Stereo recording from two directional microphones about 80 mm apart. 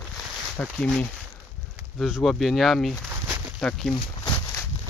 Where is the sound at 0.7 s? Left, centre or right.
Centre.